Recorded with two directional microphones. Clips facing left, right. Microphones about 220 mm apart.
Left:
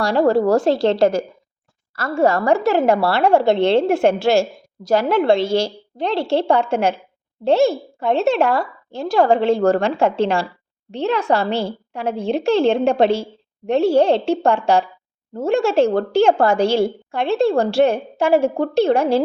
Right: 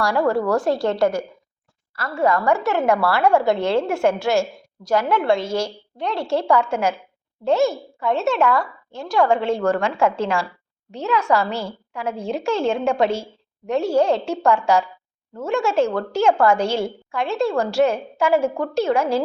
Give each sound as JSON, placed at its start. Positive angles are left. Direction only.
{"t": 0.0, "sound": "a woman's voice", "side_deg": 25}
{"t": 2.0, "sound": "a woman's voice", "side_deg": 45}
{"t": 2.3, "sound": "speech", "side_deg": 35}